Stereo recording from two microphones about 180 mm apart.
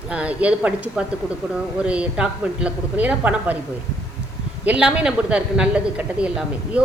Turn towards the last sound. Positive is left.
turn(degrees=-5)  # may be behind; listen again after turning